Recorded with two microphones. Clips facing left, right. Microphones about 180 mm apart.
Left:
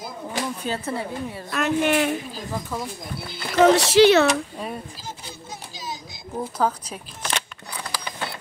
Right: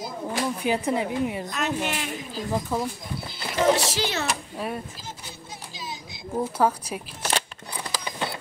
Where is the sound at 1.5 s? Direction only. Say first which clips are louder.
Left 7 dB; 55° left (ahead or behind).